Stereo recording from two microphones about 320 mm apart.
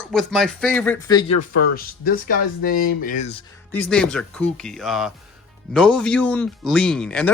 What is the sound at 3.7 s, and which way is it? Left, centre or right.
Speech, centre.